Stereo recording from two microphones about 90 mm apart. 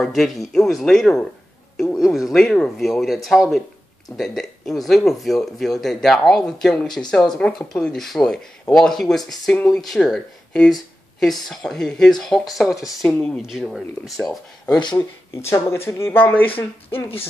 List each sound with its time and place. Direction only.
0.0 s speech: centre (ahead or behind)
13.0 s speech: 10° left (ahead or behind)
13.4 s speech: 5° right (ahead or behind)
14.7 s speech: 55° left (ahead or behind)
15.3 s speech: 30° left (ahead or behind)